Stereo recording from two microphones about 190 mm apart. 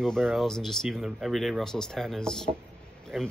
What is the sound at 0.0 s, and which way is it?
Speech, 5° left (ahead or behind).